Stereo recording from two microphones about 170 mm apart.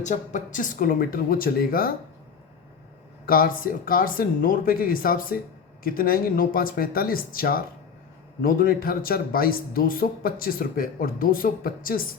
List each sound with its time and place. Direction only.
0.0 s speech: 45° left (ahead or behind)
3.2 s speech: 55° left (ahead or behind)